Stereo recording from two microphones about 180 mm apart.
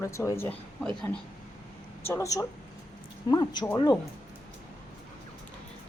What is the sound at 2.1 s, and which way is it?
Speech, 15° left (ahead or behind).